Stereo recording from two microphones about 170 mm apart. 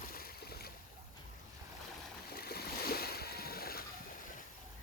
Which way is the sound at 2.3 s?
65° left (ahead or behind).